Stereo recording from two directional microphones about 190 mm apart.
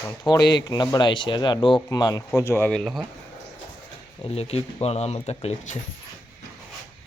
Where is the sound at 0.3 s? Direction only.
20° left (ahead or behind); by 3.1 s centre (ahead or behind).